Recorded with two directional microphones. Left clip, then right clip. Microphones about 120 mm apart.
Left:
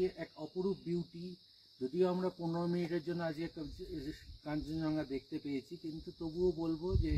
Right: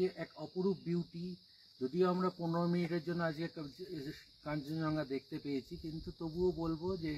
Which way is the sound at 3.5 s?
30° left (ahead or behind).